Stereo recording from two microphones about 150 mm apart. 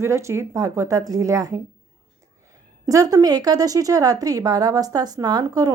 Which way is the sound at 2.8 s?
25° right (ahead or behind).